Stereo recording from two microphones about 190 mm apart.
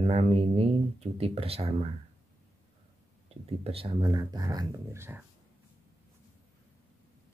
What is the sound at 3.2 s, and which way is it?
Speech, 30° right (ahead or behind).